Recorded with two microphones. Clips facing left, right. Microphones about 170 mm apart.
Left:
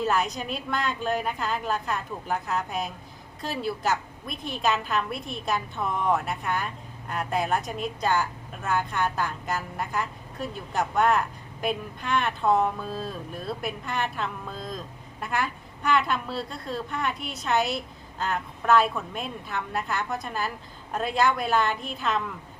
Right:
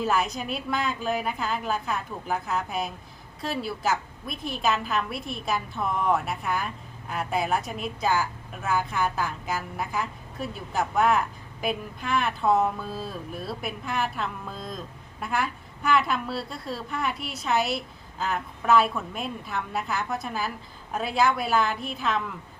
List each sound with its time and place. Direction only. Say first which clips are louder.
0.0 s a woman's voice: even; centre (ahead or behind)